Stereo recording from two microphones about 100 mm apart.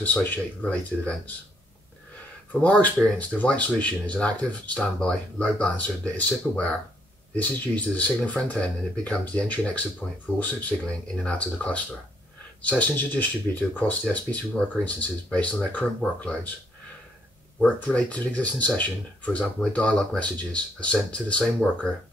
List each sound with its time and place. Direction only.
0.0 s speech: 15° left (ahead or behind)
2.5 s speech: 15° left (ahead or behind)
17.6 s speech: 10° left (ahead or behind)